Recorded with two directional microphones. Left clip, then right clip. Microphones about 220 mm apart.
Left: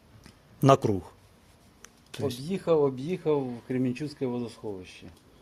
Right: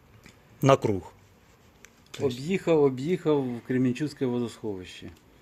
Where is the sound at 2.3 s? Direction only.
45° right (ahead or behind).